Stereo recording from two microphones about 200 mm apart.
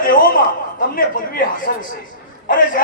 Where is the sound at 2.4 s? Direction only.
45° left (ahead or behind).